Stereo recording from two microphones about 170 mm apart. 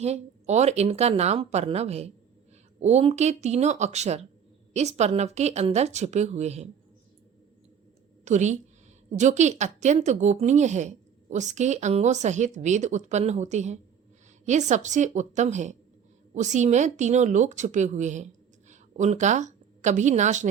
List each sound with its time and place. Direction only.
0.0 s speech: 40° right (ahead or behind)
8.2 s a woman's voice: 45° right (ahead or behind)